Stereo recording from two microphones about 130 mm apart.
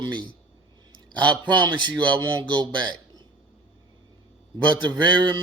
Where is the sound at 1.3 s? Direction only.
35° right (ahead or behind).